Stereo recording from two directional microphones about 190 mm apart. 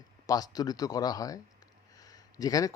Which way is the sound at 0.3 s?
20° left (ahead or behind).